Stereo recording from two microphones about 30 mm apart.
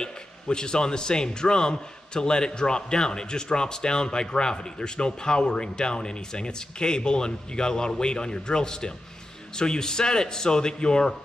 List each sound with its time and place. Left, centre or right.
0.0 s speech: left